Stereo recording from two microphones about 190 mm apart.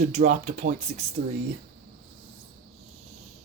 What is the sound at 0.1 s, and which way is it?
Speech, 40° right (ahead or behind).